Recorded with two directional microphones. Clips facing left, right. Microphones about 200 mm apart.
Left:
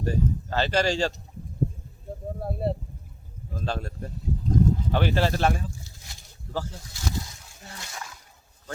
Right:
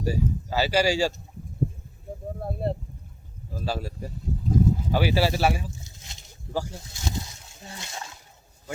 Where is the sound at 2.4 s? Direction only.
Centre (ahead or behind).